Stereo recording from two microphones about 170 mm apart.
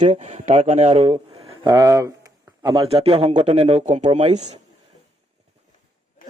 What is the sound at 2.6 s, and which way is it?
Speech, 30° right (ahead or behind).